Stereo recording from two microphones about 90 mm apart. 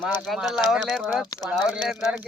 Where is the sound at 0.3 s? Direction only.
Centre (ahead or behind).